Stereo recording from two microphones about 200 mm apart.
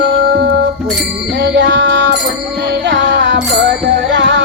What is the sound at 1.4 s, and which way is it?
Music, 65° right (ahead or behind).